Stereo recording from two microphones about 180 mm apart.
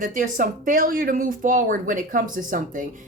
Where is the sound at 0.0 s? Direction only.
50° right (ahead or behind).